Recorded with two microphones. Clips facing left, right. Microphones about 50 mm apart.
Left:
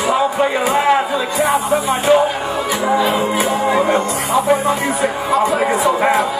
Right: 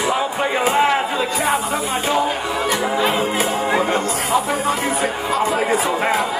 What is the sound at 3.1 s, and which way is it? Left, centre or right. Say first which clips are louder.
Music: left 3 dB; left.